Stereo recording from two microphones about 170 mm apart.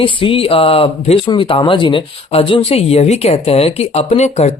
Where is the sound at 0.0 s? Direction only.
30° left (ahead or behind).